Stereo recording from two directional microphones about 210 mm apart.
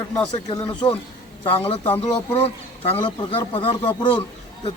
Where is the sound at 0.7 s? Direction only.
25° left (ahead or behind).